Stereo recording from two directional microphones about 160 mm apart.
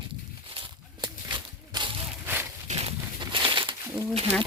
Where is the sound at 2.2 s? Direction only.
10° right (ahead or behind).